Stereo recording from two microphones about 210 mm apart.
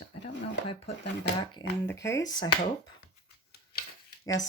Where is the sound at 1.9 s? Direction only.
15° left (ahead or behind).